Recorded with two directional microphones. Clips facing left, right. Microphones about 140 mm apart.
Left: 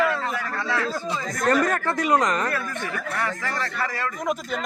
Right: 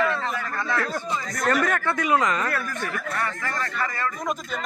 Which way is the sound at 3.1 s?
90° left.